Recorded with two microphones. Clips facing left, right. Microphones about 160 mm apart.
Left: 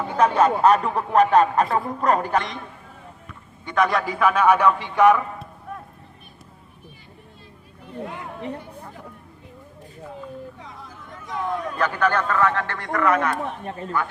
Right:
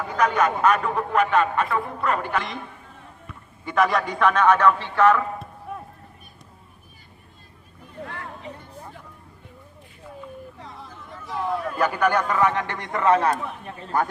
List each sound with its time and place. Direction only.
0.2 s a man's voice: 30° left (ahead or behind)
3.0 s a man's voice: centre (ahead or behind); by 5.2 s 15° left (ahead or behind)
8.0 s speech: 15° left (ahead or behind)
10.6 s speech: centre (ahead or behind); by 14.1 s 40° right (ahead or behind)